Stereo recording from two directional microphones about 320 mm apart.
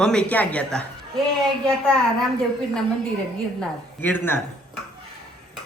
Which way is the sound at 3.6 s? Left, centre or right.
Centre.